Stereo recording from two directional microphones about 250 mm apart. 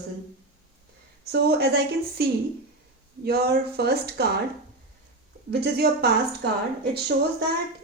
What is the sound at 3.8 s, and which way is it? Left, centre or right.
Speech, right.